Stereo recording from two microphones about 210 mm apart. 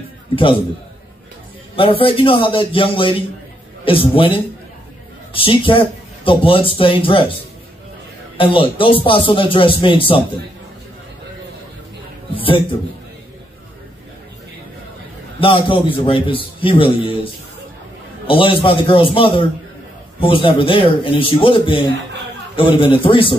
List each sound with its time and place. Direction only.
1.8 s speech: 25° left (ahead or behind)
8.4 s speech: 25° left (ahead or behind)
15.4 s speech: 25° left (ahead or behind)